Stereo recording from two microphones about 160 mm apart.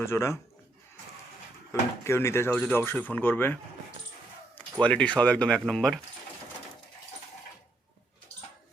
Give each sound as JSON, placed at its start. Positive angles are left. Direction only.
{"t": 0.0, "sound": "speech", "side_deg": 15}
{"t": 2.0, "sound": "speech", "side_deg": 15}